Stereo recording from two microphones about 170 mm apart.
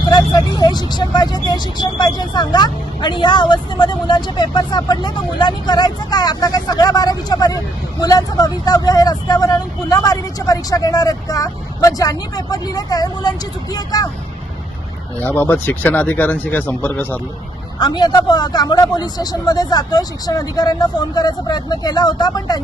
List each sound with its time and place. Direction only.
0.0 s speech: 25° left (ahead or behind)
15.2 s speech: 10° left (ahead or behind)
17.7 s speech: 25° left (ahead or behind)